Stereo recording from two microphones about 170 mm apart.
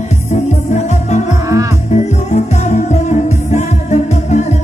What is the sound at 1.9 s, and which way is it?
Music, 40° left (ahead or behind).